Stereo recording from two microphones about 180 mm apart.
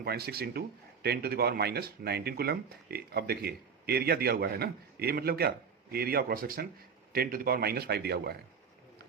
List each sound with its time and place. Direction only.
0.0 s speech: 60° right (ahead or behind)